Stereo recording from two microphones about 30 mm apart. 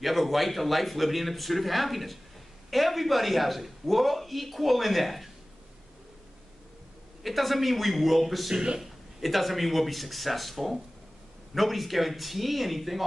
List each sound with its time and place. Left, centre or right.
0.0 s a man's voice: centre
7.2 s a man's voice: centre